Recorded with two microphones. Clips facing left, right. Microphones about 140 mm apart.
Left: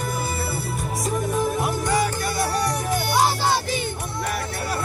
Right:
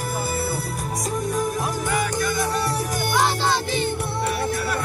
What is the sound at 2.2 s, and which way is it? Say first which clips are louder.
Music: right 1 dB; 30° left (ahead or behind).